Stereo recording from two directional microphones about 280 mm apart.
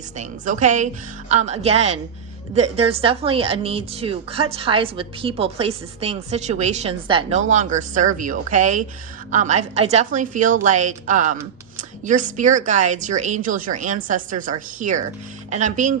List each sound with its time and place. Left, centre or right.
0.2 s a woman's voice: right